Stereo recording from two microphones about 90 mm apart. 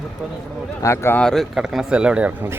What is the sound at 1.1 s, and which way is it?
Speech, 5° left (ahead or behind).